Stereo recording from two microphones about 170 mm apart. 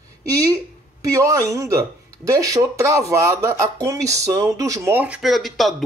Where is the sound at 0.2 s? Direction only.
20° right (ahead or behind).